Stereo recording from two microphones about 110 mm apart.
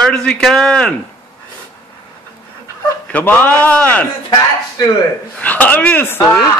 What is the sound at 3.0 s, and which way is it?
A man's voice, 15° left (ahead or behind).